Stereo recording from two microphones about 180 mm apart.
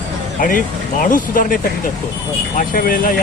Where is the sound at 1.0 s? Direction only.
50° left (ahead or behind).